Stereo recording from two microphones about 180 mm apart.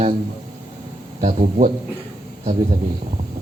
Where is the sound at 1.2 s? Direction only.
40° right (ahead or behind).